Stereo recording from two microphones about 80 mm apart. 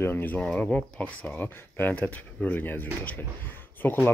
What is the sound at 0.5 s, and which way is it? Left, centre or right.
Speech, centre.